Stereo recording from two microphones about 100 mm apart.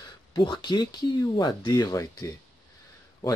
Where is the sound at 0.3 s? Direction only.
50° left (ahead or behind).